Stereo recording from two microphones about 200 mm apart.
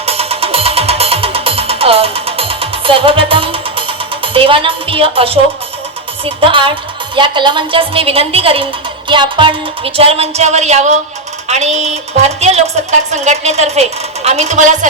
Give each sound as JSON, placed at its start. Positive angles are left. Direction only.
{"t": 0.0, "sound": "music", "side_deg": -30}
{"t": 6.2, "sound": "a woman's voice", "side_deg": -25}